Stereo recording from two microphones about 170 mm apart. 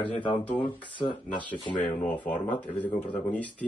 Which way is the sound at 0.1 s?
30° left (ahead or behind).